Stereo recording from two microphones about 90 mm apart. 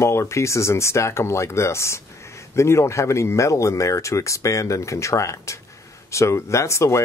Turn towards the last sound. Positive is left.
turn(degrees=35)  # may be behind; listen again after turning